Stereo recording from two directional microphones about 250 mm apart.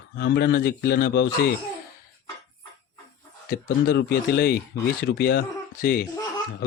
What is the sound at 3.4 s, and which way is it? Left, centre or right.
Speech, left.